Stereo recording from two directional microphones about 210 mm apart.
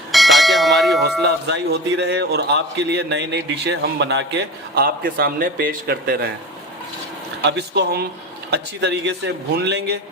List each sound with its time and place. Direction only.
0.1 s bell: centre (ahead or behind)
1.2 s a man's voice: 55° right (ahead or behind)
7.4 s a man's voice: 55° right (ahead or behind)